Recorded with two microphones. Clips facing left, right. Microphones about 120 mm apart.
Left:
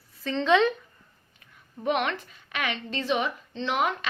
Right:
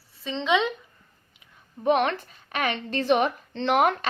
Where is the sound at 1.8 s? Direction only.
35° right (ahead or behind).